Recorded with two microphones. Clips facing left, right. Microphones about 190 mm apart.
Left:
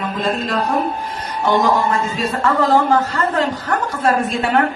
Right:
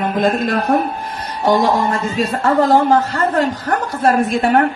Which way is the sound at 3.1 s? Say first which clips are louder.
Right 2 dB; 45° right (ahead or behind).